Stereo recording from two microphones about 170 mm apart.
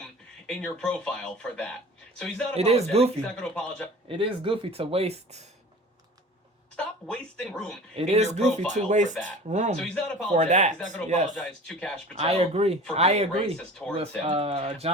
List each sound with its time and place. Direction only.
0.4 s speech: 5° left (ahead or behind)
2.6 s speech: 40° right (ahead or behind)
3.2 s speech: 5° left (ahead or behind)
4.1 s speech: 30° right (ahead or behind)
6.7 s speech: 5° left (ahead or behind)
7.9 s speech: 40° right (ahead or behind)
9.7 s speech: 5° left (ahead or behind)
10.3 s speech: 45° right (ahead or behind)
11.3 s speech: 5° left (ahead or behind)
12.1 s speech: 35° right (ahead or behind)
13.6 s speech: 5° left (ahead or behind)
14.3 s speech: 35° right (ahead or behind)